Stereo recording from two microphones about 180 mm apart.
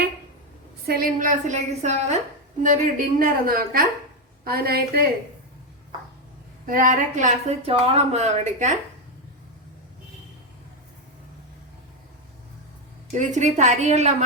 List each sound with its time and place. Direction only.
0.9 s a woman's voice: 55° right (ahead or behind)
6.7 s a woman's voice: 50° right (ahead or behind)
13.1 s a woman's voice: 40° right (ahead or behind)